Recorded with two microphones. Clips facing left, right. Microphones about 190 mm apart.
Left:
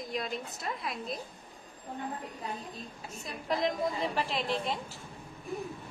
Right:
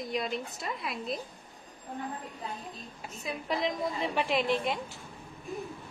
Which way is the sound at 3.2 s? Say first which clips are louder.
Even; centre (ahead or behind).